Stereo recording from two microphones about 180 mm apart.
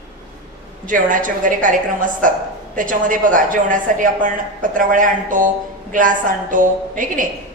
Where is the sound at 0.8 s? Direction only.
45° right (ahead or behind).